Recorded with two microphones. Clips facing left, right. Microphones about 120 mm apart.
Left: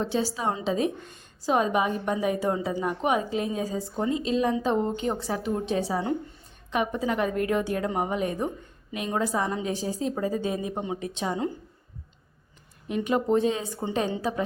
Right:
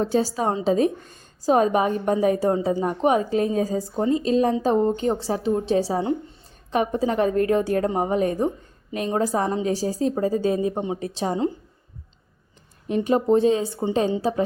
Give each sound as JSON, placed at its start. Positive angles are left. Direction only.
{"t": 0.0, "sound": "a woman's voice", "side_deg": -45}
{"t": 12.9, "sound": "a woman's voice", "side_deg": -35}